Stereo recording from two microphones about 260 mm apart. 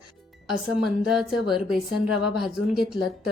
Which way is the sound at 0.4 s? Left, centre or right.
Centre.